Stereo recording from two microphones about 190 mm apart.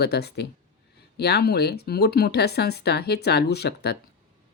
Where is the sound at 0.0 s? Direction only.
60° left (ahead or behind).